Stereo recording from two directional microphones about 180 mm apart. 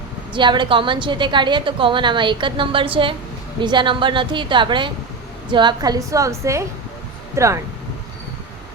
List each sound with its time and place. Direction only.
0.3 s a woman's voice: 25° right (ahead or behind)